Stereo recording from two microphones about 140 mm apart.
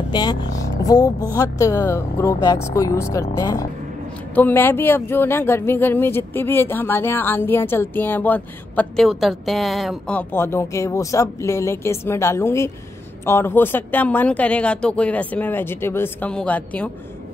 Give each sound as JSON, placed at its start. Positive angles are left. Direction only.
{"t": 0.1, "sound": "speech", "side_deg": 30}
{"t": 9.0, "sound": "speech", "side_deg": 0}